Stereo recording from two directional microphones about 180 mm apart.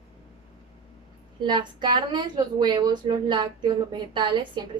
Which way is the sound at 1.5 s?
25° right (ahead or behind).